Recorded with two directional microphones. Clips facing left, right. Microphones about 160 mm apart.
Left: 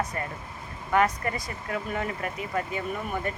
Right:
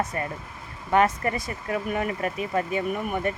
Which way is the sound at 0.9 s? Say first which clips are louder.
Right 3 dB; 25° right (ahead or behind).